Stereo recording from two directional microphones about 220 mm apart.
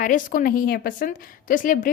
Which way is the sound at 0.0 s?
35° left (ahead or behind).